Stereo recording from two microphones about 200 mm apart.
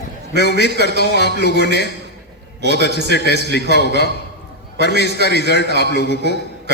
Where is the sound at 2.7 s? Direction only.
55° left (ahead or behind).